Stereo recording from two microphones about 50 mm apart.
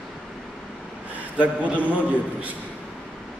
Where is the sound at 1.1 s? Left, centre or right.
Right.